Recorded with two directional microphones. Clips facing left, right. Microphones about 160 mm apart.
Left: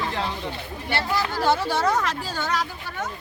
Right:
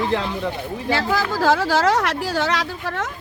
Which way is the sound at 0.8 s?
90° right.